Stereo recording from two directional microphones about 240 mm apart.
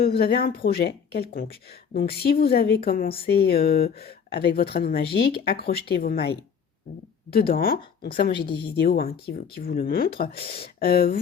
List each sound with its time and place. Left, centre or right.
0.0 s speech: left
7.3 s speech: left
8.4 s a woman's voice: left
8.7 s speech: left